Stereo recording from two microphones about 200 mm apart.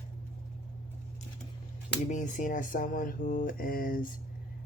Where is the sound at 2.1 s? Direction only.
40° left (ahead or behind).